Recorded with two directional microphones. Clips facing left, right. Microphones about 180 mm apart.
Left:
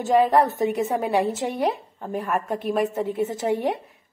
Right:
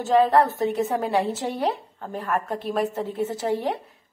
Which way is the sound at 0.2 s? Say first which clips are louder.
Even; 15° left (ahead or behind).